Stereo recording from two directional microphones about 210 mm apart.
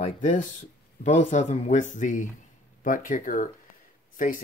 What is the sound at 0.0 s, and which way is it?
Dishes, 35° left (ahead or behind).